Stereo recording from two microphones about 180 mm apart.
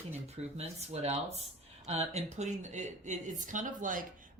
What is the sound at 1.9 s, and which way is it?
Speech, 40° right (ahead or behind).